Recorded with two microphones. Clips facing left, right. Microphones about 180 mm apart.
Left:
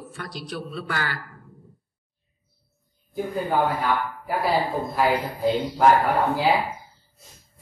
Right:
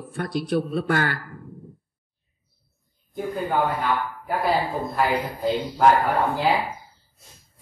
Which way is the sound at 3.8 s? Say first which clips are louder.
Even; 10° left (ahead or behind).